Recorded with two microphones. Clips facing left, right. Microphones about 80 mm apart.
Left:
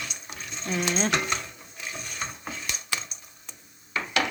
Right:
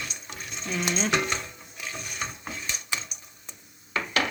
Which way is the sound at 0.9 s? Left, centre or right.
Left.